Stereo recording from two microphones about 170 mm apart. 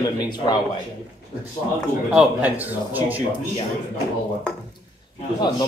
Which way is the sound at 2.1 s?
5° right (ahead or behind).